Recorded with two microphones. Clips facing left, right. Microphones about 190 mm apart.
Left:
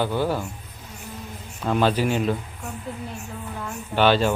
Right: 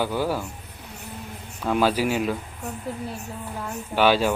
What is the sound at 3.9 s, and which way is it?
Speech, 10° right (ahead or behind).